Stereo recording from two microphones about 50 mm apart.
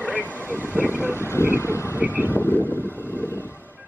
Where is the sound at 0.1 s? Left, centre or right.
Right.